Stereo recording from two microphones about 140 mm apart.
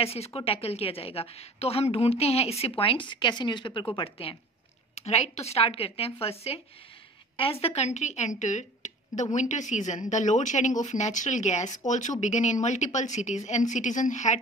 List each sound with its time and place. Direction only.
0.0 s a woman's voice: 45° left (ahead or behind)
4.9 s a woman's voice: 50° left (ahead or behind)